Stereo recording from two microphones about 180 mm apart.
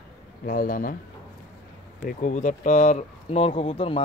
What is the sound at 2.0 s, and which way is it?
Speech, 45° left (ahead or behind).